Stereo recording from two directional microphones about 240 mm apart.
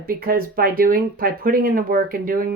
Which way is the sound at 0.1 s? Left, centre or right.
Right.